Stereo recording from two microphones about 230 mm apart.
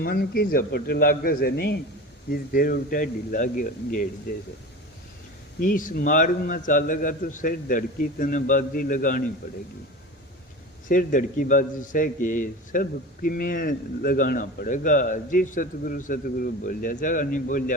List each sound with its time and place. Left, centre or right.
0.0 s a man's voice: left
5.5 s a man's voice: left
10.8 s a man's voice: left